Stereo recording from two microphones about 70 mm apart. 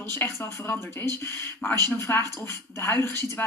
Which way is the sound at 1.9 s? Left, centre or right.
Left.